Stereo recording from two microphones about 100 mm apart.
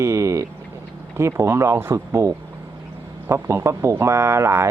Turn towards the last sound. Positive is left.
turn(degrees=-25)  # may be behind; listen again after turning